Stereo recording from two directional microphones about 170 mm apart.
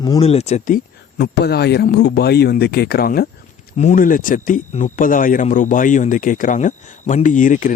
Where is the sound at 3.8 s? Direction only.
50° left (ahead or behind).